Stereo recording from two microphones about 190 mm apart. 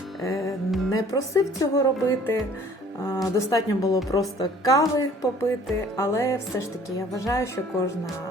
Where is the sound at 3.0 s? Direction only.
15° left (ahead or behind).